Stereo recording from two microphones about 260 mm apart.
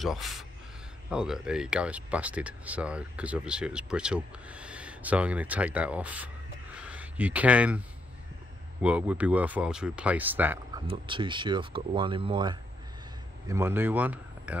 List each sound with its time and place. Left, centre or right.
0.0 s speech: centre
8.8 s speech: centre
10.9 s speech: centre